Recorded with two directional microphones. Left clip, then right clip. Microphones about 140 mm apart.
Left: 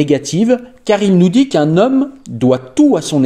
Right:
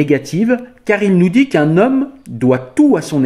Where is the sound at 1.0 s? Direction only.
55° left (ahead or behind).